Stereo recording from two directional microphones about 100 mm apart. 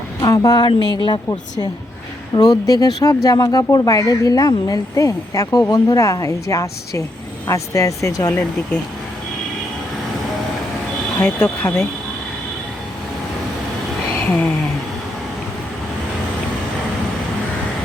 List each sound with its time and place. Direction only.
0.2 s a woman's voice: 45° left (ahead or behind)
8.3 s speech: 10° left (ahead or behind)
11.2 s speech: 10° left (ahead or behind)